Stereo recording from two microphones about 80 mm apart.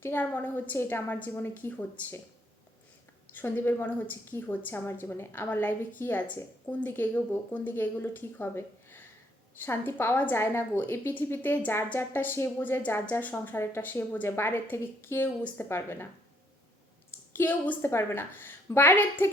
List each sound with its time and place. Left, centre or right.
0.0 s a woman's voice: left
3.3 s a woman's voice: left
17.3 s a woman's voice: left